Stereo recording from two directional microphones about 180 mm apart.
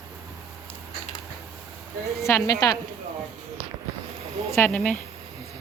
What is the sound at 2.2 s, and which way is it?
Speech, 20° left (ahead or behind).